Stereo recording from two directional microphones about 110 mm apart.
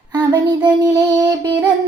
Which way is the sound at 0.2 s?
40° right (ahead or behind).